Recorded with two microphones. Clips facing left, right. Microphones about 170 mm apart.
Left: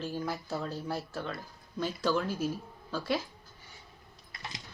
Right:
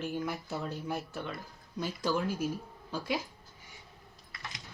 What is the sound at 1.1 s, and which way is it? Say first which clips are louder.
Speech: left 2 dB; 15° right (ahead or behind).